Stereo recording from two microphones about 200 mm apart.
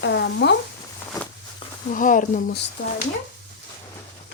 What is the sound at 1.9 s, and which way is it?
Speech, 40° left (ahead or behind).